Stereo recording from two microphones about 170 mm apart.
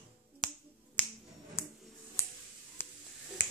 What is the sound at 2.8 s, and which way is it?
Finger snapping, 10° left (ahead or behind).